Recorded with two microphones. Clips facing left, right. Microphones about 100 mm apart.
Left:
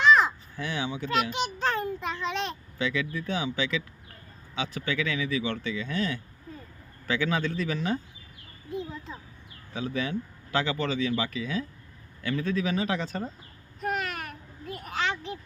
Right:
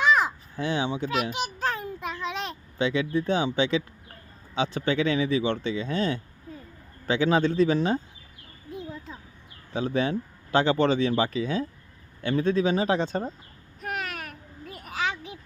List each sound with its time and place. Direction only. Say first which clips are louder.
0.0 s caw: left 2 dB; 10° right (ahead or behind)
0.6 s speech: right 5 dB; 25° right (ahead or behind)
1.1 s a child's voice: left 1 dB; 5° right (ahead or behind)
2.7 s speech: right 6 dB; 25° right (ahead or behind)
9.7 s speech: right 5 dB; 35° right (ahead or behind)
13.8 s a sound: left 2 dB; centre (ahead or behind)